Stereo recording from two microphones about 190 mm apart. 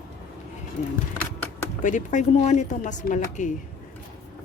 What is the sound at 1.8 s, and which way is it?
Speech, 40° left (ahead or behind).